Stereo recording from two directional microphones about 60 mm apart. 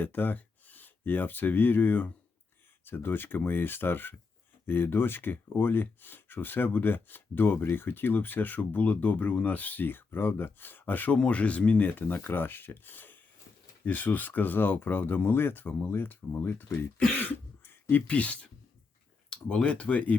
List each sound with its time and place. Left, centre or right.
0.0 s speech: left
17.2 s beatboxing: left
19.3 s speech: centre